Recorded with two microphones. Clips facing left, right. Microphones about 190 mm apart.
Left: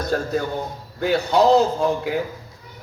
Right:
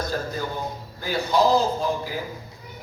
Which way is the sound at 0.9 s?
70° left (ahead or behind).